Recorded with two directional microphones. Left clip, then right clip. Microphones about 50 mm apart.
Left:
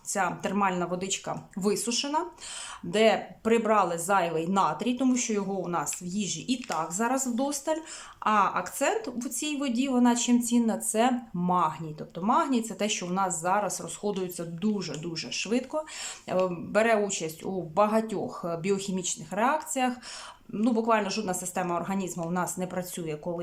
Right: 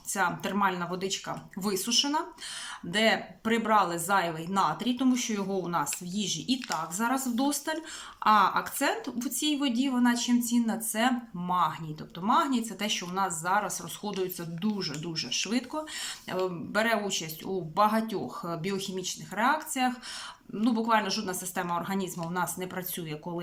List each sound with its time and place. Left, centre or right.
0.1 s speech: left
1.0 s speech: left
1.7 s speech: left
9.8 s speech: left
15.1 s speech: left
19.4 s speech: left